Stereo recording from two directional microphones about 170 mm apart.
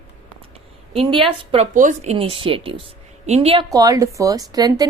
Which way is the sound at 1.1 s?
30° right (ahead or behind).